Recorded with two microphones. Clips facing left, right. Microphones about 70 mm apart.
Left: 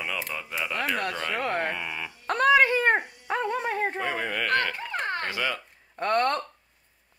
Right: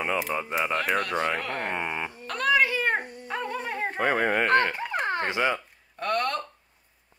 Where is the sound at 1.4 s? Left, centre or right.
Left.